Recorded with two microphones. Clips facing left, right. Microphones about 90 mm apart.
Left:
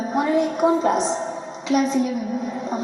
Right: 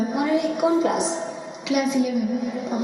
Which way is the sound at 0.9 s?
15° right (ahead or behind).